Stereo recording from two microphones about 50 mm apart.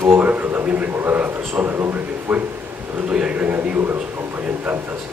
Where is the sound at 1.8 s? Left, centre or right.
Right.